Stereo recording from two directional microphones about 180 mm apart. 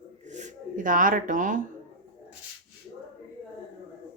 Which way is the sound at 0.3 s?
40° right (ahead or behind).